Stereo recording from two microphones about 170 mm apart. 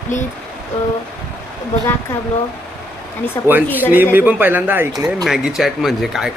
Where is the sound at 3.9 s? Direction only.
10° right (ahead or behind).